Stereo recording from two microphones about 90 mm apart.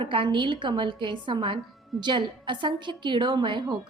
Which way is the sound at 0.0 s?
70° right (ahead or behind).